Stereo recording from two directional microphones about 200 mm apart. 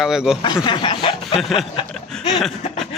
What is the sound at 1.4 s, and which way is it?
Speech, centre (ahead or behind).